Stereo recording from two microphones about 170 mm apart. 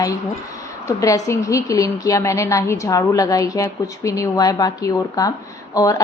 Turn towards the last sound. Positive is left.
turn(degrees=20)  # may be behind; listen again after turning